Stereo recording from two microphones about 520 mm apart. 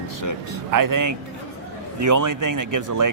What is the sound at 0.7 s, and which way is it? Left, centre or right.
A man's voice, right.